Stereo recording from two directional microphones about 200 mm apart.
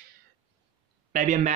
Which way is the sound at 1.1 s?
40° right (ahead or behind).